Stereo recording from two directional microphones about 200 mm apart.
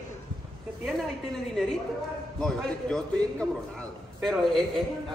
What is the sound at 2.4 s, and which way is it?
Speech, centre (ahead or behind).